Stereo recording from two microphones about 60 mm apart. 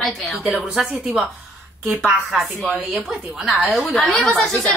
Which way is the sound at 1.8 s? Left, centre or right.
Centre.